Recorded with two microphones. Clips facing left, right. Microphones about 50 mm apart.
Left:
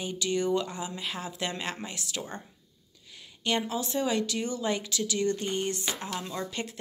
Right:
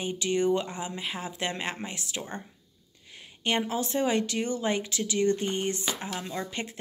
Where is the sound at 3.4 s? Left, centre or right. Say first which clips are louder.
Right 1 dB; right.